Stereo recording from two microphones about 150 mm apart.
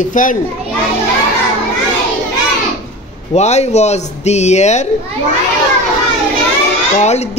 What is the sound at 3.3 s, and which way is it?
Speech, 45° left (ahead or behind).